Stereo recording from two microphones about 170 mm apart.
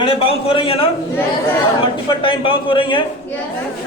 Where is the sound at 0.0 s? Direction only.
30° left (ahead or behind).